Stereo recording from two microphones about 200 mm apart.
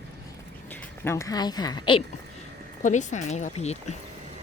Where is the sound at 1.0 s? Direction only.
15° left (ahead or behind).